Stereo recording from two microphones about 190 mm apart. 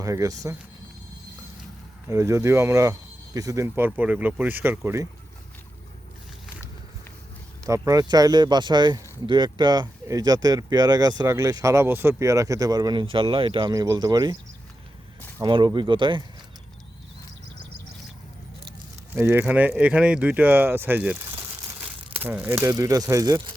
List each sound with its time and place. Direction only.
0.0 s speech: 15° right (ahead or behind)
2.0 s speech: 15° right (ahead or behind)
7.6 s speech: 20° right (ahead or behind)
15.4 s speech: 25° right (ahead or behind)
19.1 s speech: 10° right (ahead or behind)